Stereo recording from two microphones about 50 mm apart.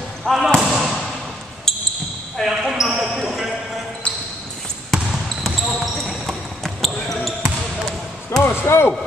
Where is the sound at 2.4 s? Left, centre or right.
Centre.